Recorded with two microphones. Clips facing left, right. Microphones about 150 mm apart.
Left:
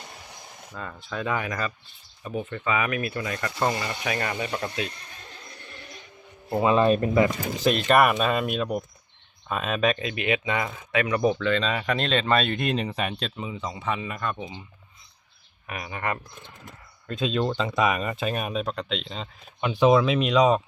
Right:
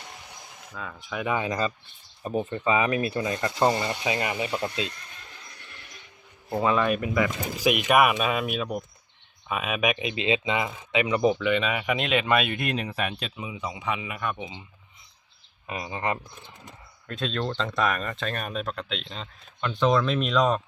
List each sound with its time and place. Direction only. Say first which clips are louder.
0.9 s speech: right 1 dB; 15° right (ahead or behind)
2.2 s speech: right 3 dB; 40° right (ahead or behind); by 4.7 s 20° right (ahead or behind)
6.6 s speech: left 4 dB; 25° left (ahead or behind)
7.5 s speech: even; 10° right (ahead or behind)
15.6 s speech: right 1 dB; 25° right (ahead or behind)
17.1 s speech: left 4 dB; centre (ahead or behind)